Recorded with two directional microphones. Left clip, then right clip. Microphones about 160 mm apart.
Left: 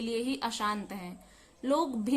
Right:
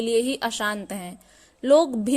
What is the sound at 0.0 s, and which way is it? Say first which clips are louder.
A woman's voice: right 10 dB; 45° right (ahead or behind).